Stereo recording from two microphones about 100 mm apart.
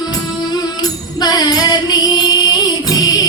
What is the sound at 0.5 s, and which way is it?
Music, 45° left (ahead or behind).